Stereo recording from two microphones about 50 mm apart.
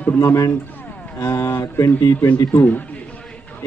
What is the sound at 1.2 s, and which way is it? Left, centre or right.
Speech, left.